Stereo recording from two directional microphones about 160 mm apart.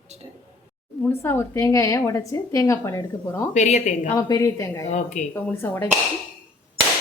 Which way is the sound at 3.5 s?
45° left (ahead or behind).